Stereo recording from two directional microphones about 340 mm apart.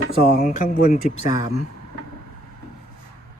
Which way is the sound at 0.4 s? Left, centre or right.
Left.